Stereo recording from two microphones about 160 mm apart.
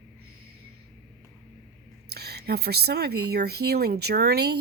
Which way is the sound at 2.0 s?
85° right.